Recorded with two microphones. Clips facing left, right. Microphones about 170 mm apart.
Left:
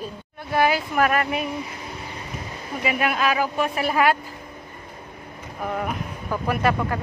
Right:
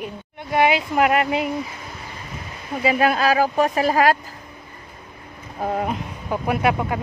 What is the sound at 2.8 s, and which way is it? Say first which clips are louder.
Speech: right 4 dB; 35° right (ahead or behind).